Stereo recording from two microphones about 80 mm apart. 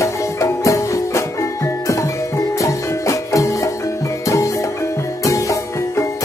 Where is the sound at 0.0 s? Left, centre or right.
Left.